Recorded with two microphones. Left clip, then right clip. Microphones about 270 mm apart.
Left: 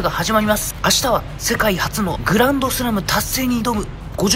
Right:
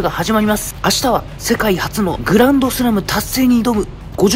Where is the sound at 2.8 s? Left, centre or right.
Right.